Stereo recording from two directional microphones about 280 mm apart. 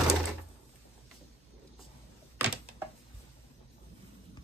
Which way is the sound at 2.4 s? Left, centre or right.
Centre.